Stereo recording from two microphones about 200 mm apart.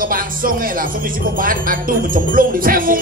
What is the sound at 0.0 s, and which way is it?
Speech, 45° right (ahead or behind).